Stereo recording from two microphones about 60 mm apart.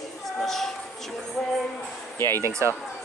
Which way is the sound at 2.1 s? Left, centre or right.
Left.